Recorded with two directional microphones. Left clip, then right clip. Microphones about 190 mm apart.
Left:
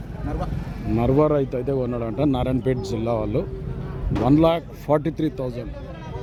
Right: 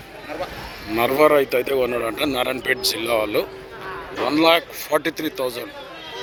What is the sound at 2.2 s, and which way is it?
Speech, 10° left (ahead or behind).